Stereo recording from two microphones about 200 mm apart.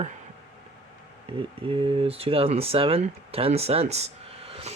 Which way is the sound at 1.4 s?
25° right (ahead or behind).